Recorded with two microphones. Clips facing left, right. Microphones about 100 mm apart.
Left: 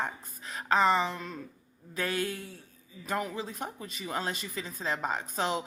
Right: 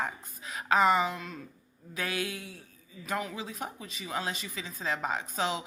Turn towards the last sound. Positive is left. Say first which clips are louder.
# left 1 dB
turn(degrees=0)  # may be behind; listen again after turning